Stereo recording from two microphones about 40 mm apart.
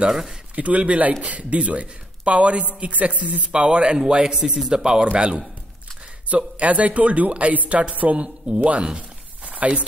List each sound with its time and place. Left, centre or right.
0.1 s speech: centre
0.6 s speech: right
3.5 s speech: right
6.2 s speech: right
8.7 s a sound: right